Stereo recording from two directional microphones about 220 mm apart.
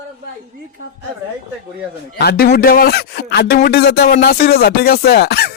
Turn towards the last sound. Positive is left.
turn(degrees=45)  # may be behind; listen again after turning